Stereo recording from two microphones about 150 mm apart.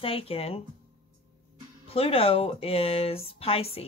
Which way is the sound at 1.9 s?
40° left (ahead or behind).